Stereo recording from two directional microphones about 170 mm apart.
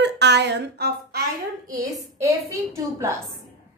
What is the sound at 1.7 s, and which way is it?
A woman's voice, 20° right (ahead or behind).